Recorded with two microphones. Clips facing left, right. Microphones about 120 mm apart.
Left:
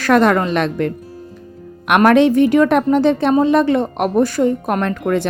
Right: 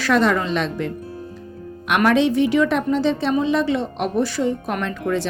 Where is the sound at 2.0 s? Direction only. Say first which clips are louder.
Left 5 dB; 55° left (ahead or behind).